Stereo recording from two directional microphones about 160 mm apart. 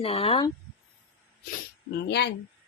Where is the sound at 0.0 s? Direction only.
35° left (ahead or behind).